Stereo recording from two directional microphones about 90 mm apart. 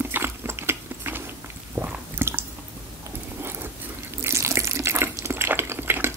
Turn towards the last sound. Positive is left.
turn(degrees=-25)  # may be behind; listen again after turning